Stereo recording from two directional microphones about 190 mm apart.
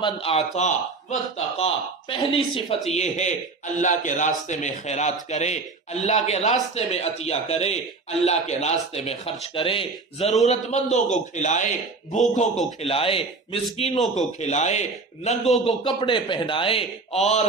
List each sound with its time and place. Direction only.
0.0 s speech: 30° left (ahead or behind)